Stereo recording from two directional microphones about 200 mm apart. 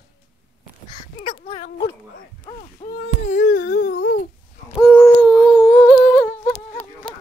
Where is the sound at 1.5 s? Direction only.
35° left (ahead or behind).